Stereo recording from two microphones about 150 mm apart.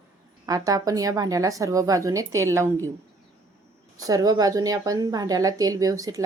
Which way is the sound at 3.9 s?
25° right (ahead or behind).